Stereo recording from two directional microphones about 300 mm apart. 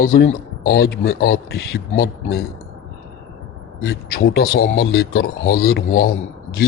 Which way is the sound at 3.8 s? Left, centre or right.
Left.